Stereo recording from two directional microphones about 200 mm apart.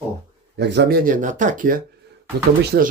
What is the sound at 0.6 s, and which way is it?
Speech, 55° right (ahead or behind).